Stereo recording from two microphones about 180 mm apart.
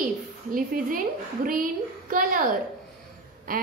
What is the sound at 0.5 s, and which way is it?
Speech, 50° right (ahead or behind).